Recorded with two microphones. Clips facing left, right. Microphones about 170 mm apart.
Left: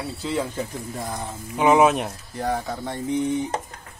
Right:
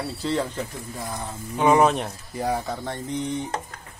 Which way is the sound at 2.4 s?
10° right (ahead or behind).